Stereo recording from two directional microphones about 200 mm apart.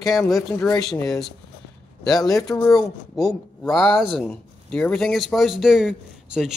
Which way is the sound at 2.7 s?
Centre (ahead or behind).